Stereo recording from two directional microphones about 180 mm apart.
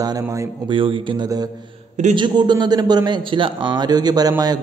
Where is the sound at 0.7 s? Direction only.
30° right (ahead or behind).